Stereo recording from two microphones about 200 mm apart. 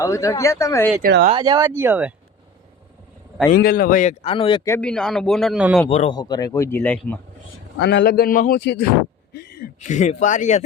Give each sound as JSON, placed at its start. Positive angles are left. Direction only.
{"t": 0.0, "sound": "speech", "side_deg": 15}
{"t": 1.0, "sound": "speech", "side_deg": -45}
{"t": 1.3, "sound": "speech", "side_deg": -20}
{"t": 3.5, "sound": "speech", "side_deg": 45}
{"t": 4.6, "sound": "a man's voice", "side_deg": 10}
{"t": 5.9, "sound": "speech", "side_deg": 30}
{"t": 6.1, "sound": "speech", "side_deg": 20}
{"t": 7.8, "sound": "a man's voice", "side_deg": 60}
{"t": 9.3, "sound": "a sound", "side_deg": 55}
{"t": 9.8, "sound": "speech", "side_deg": 35}